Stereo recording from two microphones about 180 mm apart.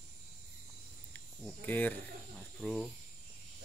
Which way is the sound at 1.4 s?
10° left (ahead or behind).